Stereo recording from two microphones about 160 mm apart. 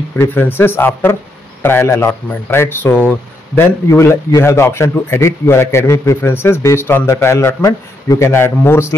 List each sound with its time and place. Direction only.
0.2 s speech: 15° left (ahead or behind)